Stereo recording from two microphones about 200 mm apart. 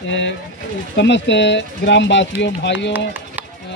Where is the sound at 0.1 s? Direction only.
65° left (ahead or behind).